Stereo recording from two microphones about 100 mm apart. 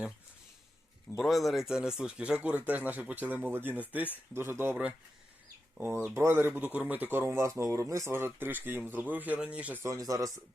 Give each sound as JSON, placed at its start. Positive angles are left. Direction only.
{"t": 1.1, "sound": "speech", "side_deg": 0}
{"t": 5.8, "sound": "speech", "side_deg": -20}
{"t": 9.8, "sound": "speech", "side_deg": -35}